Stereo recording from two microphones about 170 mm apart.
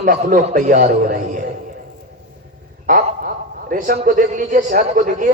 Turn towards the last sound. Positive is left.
turn(degrees=-55)  # may be behind; listen again after turning